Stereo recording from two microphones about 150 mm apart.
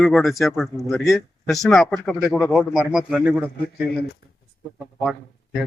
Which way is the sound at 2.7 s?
5° right (ahead or behind).